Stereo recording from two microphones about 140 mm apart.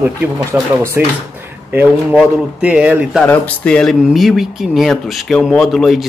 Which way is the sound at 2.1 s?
10° right (ahead or behind).